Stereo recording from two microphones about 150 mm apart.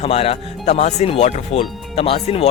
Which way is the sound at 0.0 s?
40° left (ahead or behind).